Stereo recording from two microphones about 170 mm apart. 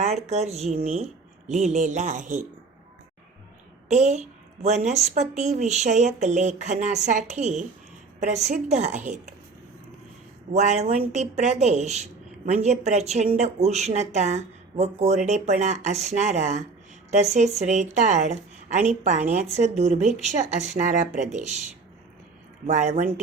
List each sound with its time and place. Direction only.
0.0 s a woman's voice: 40° right (ahead or behind)
3.8 s a woman's voice: 45° right (ahead or behind)
10.5 s a woman's voice: 40° right (ahead or behind)
22.6 s a woman's voice: 40° right (ahead or behind)